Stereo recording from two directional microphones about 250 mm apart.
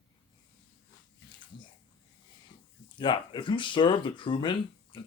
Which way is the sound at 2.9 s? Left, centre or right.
Centre.